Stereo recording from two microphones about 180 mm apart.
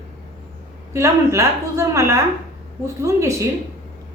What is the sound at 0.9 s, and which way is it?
A woman's voice, 15° right (ahead or behind).